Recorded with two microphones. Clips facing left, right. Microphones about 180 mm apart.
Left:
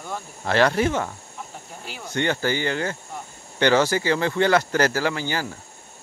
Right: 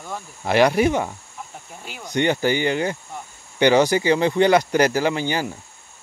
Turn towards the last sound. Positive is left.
turn(degrees=-20)  # may be behind; listen again after turning